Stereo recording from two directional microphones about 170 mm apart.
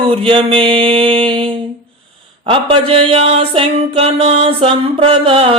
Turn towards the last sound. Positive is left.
turn(degrees=-35)  # may be behind; listen again after turning